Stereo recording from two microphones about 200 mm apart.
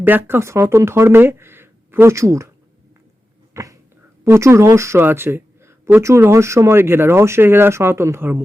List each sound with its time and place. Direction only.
0.0 s speech: 10° right (ahead or behind)
3.5 s dog: 15° right (ahead or behind)
4.2 s speech: 15° right (ahead or behind)